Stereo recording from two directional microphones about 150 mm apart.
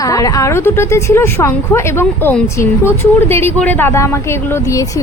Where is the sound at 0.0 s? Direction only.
20° left (ahead or behind).